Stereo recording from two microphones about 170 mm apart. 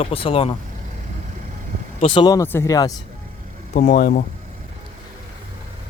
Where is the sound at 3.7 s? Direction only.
60° left (ahead or behind).